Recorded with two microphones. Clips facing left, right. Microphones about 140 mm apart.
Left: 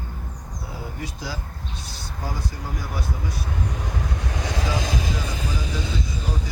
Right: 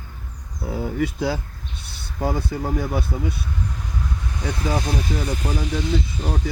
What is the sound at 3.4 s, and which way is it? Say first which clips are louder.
Vehicle: left 1 dB; 75° left (ahead or behind).